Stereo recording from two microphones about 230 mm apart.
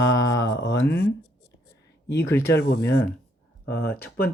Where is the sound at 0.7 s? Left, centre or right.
Centre.